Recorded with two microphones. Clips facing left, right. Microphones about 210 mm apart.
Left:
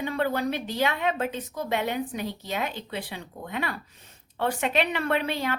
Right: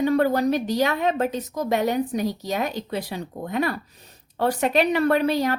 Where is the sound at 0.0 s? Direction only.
40° right (ahead or behind).